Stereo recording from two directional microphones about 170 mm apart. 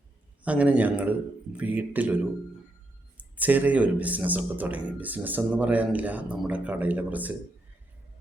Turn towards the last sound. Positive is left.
turn(degrees=-10)  # may be behind; listen again after turning